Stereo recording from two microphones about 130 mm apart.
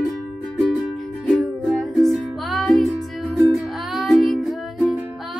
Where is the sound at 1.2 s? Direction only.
Centre (ahead or behind).